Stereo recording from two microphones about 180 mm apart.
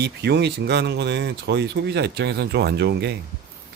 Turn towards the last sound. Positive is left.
turn(degrees=-65)  # may be behind; listen again after turning